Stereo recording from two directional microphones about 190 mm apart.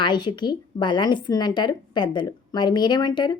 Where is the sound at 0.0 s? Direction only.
25° left (ahead or behind).